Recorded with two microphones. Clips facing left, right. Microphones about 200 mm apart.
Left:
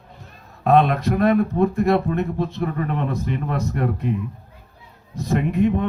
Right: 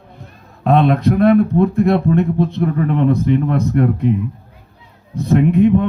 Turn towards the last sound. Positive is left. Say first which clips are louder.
# right 7 dB
turn(degrees=-55)  # may be behind; listen again after turning